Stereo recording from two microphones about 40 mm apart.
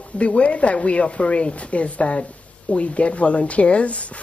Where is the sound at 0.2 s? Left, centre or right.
Left.